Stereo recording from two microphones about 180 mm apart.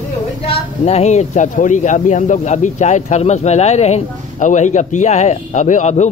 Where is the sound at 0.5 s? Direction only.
35° left (ahead or behind).